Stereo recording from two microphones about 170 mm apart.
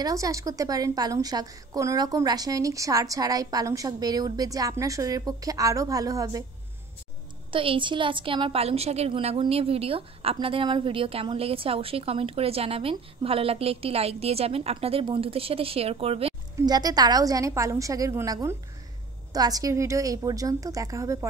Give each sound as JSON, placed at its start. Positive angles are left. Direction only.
{"t": 0.0, "sound": "a woman's voice", "side_deg": -20}
{"t": 7.5, "sound": "a woman's voice", "side_deg": -30}
{"t": 16.5, "sound": "a woman's voice", "side_deg": -25}